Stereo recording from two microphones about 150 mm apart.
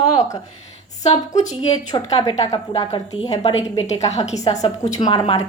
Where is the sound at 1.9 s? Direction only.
25° left (ahead or behind).